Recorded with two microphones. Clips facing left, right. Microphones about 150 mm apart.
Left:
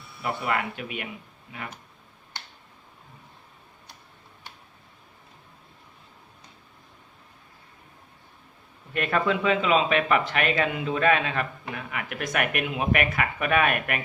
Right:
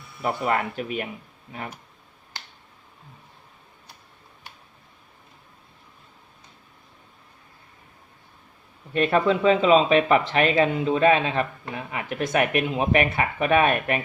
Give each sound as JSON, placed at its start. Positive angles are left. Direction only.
{"t": 0.2, "sound": "speech", "side_deg": -40}
{"t": 8.9, "sound": "speech", "side_deg": -30}